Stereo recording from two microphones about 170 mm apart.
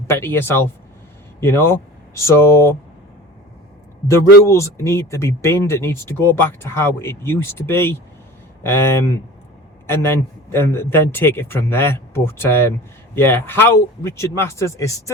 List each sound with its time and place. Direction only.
0.1 s a man's voice: 15° left (ahead or behind)
4.1 s a man's voice: 15° left (ahead or behind)